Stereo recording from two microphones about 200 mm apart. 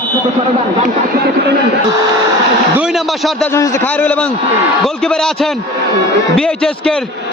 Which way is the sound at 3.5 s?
15° left (ahead or behind).